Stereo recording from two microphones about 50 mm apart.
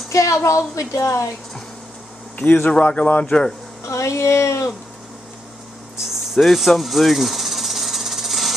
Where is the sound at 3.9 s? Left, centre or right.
Left.